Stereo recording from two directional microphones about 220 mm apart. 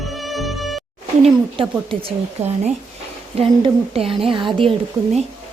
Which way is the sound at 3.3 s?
25° right (ahead or behind).